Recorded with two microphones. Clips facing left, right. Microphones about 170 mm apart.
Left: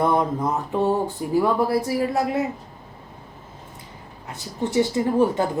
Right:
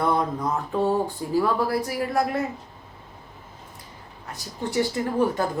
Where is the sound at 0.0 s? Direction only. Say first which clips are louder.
Left 3 dB; 20° left (ahead or behind).